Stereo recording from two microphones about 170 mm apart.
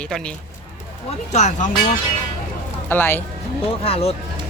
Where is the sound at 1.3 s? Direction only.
45° left (ahead or behind).